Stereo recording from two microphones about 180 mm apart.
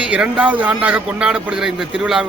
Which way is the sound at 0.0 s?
5° right (ahead or behind).